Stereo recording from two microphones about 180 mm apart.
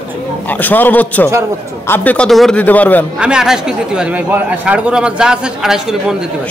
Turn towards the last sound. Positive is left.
turn(degrees=-5)  # may be behind; listen again after turning